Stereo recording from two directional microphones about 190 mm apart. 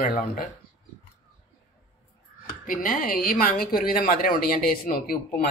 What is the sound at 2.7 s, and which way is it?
A woman's voice, 50° left (ahead or behind).